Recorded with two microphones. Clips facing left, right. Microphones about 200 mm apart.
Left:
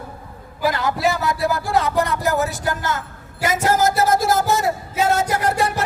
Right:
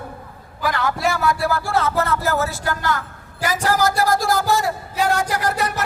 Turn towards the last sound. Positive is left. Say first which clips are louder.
# left 2 dB
turn(degrees=25)  # may be behind; listen again after turning